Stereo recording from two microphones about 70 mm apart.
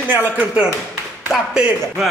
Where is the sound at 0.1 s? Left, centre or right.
Right.